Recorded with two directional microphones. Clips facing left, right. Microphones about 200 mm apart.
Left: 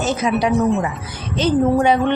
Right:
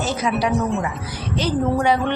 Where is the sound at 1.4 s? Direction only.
20° left (ahead or behind).